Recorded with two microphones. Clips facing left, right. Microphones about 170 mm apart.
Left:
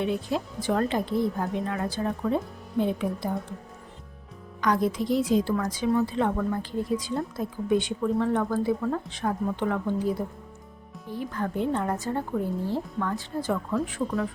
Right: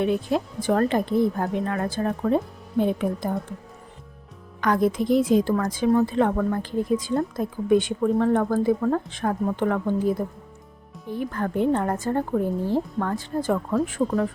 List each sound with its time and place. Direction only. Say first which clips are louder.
0.0 s a woman's voice: right 4 dB; 55° right (ahead or behind)
4.6 s a woman's voice: right 3 dB; 55° right (ahead or behind)